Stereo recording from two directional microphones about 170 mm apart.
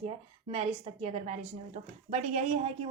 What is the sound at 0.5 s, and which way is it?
A woman's voice, 35° right (ahead or behind).